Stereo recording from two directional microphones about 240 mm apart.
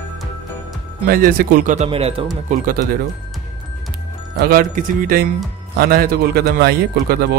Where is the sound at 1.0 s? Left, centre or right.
Right.